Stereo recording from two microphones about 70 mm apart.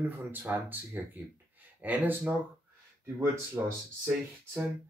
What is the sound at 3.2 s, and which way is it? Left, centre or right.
Speech, right.